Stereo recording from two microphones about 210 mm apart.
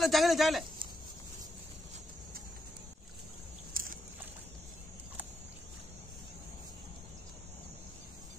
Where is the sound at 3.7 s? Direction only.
40° right (ahead or behind).